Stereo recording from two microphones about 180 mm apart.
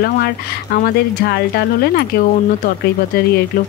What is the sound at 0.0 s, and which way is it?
Speech, 60° left (ahead or behind).